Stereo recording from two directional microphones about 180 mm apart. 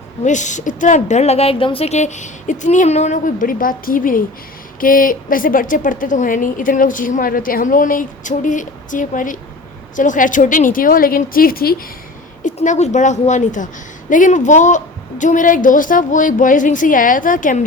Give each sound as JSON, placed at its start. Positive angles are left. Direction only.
{"t": 0.3, "sound": "a woman's voice", "side_deg": 40}
{"t": 12.4, "sound": "a woman's voice", "side_deg": 45}